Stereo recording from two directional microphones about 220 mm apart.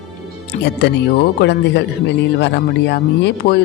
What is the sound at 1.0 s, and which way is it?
Speech, 50° left (ahead or behind).